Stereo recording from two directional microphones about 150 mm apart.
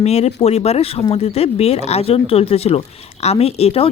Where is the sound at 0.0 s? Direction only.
45° left (ahead or behind).